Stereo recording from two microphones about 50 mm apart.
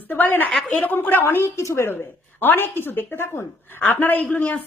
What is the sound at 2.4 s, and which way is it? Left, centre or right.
A woman's voice, left.